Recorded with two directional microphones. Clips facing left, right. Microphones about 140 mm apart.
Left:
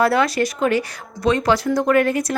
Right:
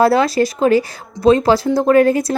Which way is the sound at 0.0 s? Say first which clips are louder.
Right 4 dB; 30° right (ahead or behind).